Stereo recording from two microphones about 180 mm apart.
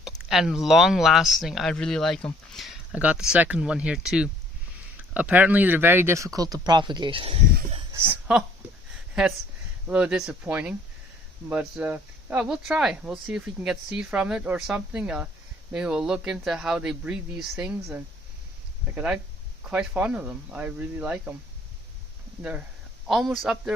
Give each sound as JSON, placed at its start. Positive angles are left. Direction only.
{"t": 0.0, "sound": "speech", "side_deg": 0}
{"t": 7.9, "sound": "speech", "side_deg": -10}
{"t": 9.8, "sound": "speech", "side_deg": -5}
{"t": 23.0, "sound": "speech", "side_deg": 0}